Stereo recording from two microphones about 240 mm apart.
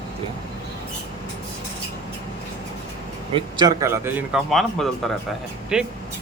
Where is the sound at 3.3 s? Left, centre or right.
Centre.